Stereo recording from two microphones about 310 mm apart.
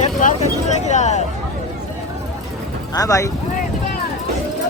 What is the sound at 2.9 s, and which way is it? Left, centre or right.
Speech, centre.